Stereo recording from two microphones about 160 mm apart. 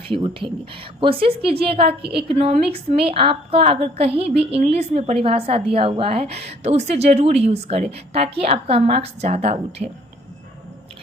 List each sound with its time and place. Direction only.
0.1 s a woman's voice: 30° right (ahead or behind)